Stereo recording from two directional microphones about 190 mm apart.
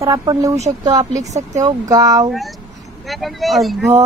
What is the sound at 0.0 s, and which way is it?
Speech, 20° right (ahead or behind).